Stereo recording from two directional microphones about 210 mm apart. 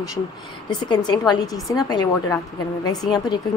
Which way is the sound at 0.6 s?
20° left (ahead or behind).